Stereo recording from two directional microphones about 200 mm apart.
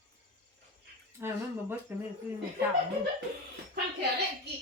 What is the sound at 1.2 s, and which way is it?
Speech, 10° right (ahead or behind).